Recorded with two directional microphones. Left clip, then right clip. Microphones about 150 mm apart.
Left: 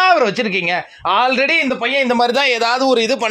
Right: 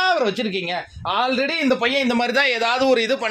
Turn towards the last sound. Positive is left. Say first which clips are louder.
# left 3 dB
turn(degrees=30)  # may be behind; listen again after turning